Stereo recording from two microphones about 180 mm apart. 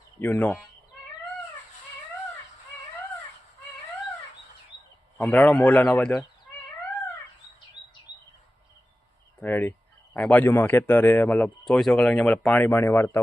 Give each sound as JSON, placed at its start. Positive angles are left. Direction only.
{"t": 0.2, "sound": "a man's voice", "side_deg": 10}
{"t": 5.1, "sound": "a man's voice", "side_deg": 10}
{"t": 9.4, "sound": "a man's voice", "side_deg": 10}